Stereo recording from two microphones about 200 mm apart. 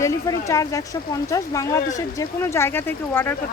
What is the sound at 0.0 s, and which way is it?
Speech, 15° left (ahead or behind).